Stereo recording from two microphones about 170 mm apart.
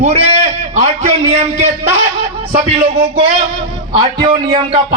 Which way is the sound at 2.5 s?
30° right (ahead or behind).